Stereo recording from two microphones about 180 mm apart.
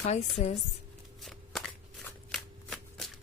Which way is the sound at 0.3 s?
35° left (ahead or behind).